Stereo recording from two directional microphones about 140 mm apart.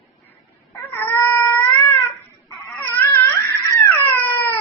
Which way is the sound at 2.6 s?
15° left (ahead or behind).